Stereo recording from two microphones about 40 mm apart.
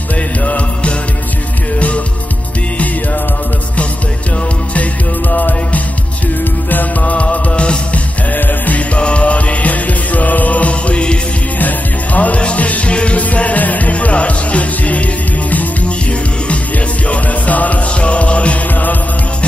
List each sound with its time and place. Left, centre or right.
0.4 s music: left
5.3 s music: left
8.3 s music: left
8.9 s music: left
11.5 s music: left
17.1 s music: left
18.7 s music: left